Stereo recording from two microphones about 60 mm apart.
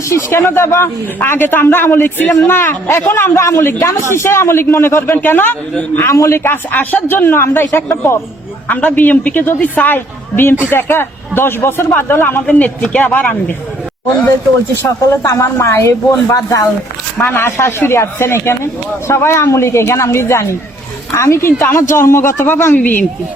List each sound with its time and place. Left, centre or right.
0.1 s speech: left
1.2 s a woman's voice: left
5.1 s a woman's voice: left
6.1 s a woman's voice: left
8.6 s a woman's voice: left
12.5 s speech: left
14.8 s speech: left
16.3 s speech: left
17.2 s speech: left
22.8 s speech: left